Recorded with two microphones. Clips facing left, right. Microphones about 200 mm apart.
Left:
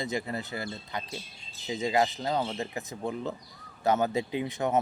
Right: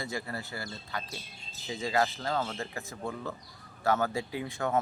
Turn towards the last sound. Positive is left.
turn(degrees=20)  # may be behind; listen again after turning